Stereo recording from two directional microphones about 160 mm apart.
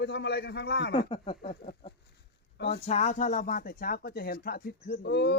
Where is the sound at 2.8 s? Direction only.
45° left (ahead or behind); by 4.7 s 65° left (ahead or behind).